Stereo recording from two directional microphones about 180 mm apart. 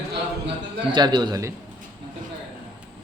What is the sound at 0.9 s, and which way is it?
Speech, 25° right (ahead or behind).